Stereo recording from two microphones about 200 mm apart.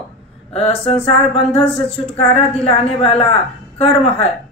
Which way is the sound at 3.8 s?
30° left (ahead or behind).